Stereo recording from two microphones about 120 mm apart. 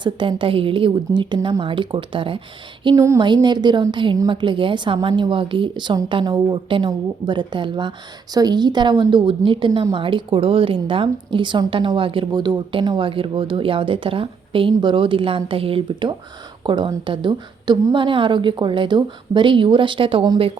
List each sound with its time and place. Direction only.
0.0 s speech: 45° right (ahead or behind)
2.9 s a sound: 25° right (ahead or behind)
3.2 s a woman's voice: 35° right (ahead or behind)